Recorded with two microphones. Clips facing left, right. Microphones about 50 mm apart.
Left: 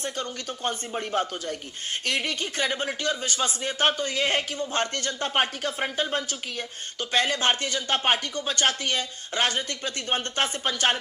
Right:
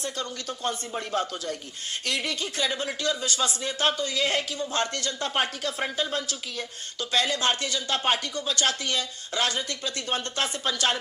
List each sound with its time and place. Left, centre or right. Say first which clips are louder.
0.0 s speech: left 1 dB; left